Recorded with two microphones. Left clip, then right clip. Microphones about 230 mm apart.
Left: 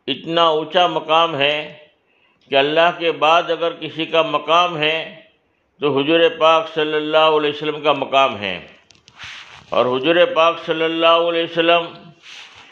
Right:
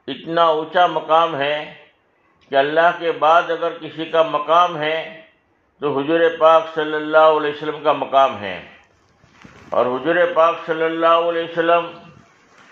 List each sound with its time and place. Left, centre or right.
0.0 s a man's voice: left
9.7 s a man's voice: left